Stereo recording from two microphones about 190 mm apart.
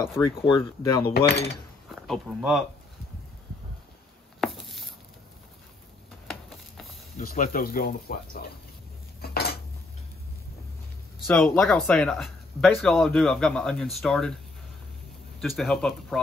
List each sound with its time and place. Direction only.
0.2 s speech: 10° left (ahead or behind)
2.0 s speech: centre (ahead or behind)
4.4 s a sound: centre (ahead or behind)
6.2 s a sound: centre (ahead or behind)
7.2 s speech: 50° left (ahead or behind)
9.2 s dishes: 55° left (ahead or behind)
11.2 s speech: 5° left (ahead or behind)
15.4 s speech: centre (ahead or behind)